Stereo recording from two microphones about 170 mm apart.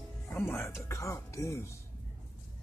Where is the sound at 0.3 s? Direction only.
15° left (ahead or behind).